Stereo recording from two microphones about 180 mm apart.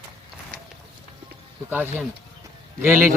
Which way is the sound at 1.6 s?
10° right (ahead or behind).